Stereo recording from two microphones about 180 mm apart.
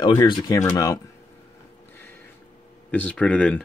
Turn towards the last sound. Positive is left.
turn(degrees=5)  # may be behind; listen again after turning